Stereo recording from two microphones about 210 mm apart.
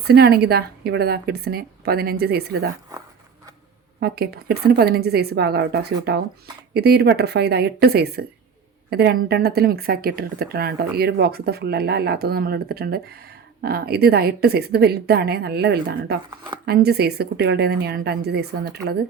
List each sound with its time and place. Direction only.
0.1 s a woman's voice: 50° right (ahead or behind)
4.0 s a woman's voice: 50° right (ahead or behind)